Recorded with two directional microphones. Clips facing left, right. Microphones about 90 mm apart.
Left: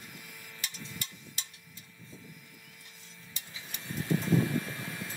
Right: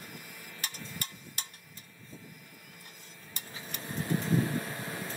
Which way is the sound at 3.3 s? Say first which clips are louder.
Right 4 dB; 50° right (ahead or behind).